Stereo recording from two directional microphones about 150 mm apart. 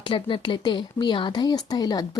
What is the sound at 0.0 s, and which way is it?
Speech, 35° left (ahead or behind).